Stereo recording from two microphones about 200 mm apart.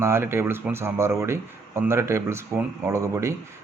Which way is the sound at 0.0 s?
10° right (ahead or behind).